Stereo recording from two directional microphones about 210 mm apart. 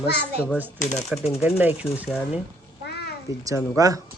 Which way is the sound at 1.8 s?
5° right (ahead or behind).